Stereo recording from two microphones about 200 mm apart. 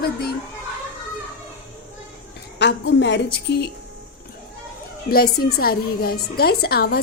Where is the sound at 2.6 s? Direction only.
60° left (ahead or behind).